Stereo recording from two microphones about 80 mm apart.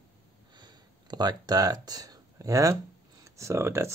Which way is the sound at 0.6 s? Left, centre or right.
Right.